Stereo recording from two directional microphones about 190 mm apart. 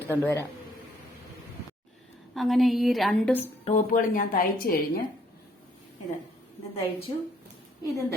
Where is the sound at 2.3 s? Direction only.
Centre (ahead or behind).